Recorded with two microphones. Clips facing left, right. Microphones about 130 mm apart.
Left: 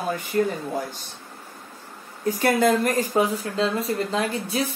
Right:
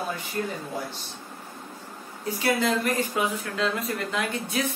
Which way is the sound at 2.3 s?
50° left (ahead or behind).